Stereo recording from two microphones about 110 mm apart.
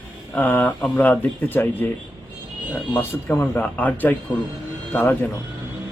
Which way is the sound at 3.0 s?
20° left (ahead or behind).